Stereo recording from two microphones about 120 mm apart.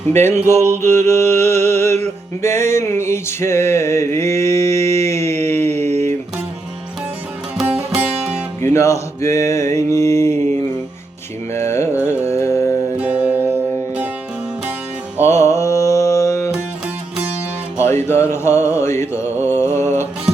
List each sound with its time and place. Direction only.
0.1 s music: 65° right (ahead or behind)
0.8 s a sound: 20° left (ahead or behind)
5.6 s a sound: 65° right (ahead or behind)
7.6 s music: 10° right (ahead or behind)
8.6 s a sound: 25° left (ahead or behind)
11.5 s music: 20° left (ahead or behind)
13.0 s music: 15° right (ahead or behind)
15.2 s music: 25° left (ahead or behind)
17.7 s music: 70° right (ahead or behind)
18.2 s mantra: 20° left (ahead or behind)
19.7 s music: 70° right (ahead or behind)